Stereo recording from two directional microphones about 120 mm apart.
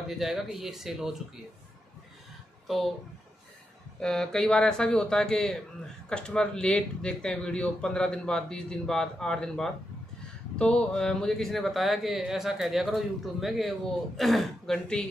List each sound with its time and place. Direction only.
0.2 s speech: 5° right (ahead or behind)
4.0 s speech: 5° left (ahead or behind)